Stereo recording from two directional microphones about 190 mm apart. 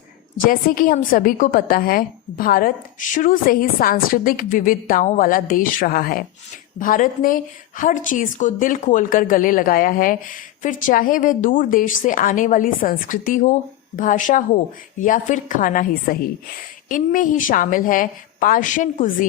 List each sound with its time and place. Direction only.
0.4 s a woman's voice: 50° left (ahead or behind)